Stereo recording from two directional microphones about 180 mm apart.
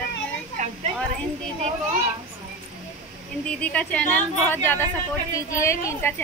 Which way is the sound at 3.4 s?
5° left (ahead or behind).